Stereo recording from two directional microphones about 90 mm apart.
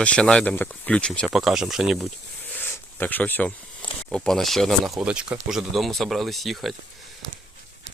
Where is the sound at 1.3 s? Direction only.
5° right (ahead or behind).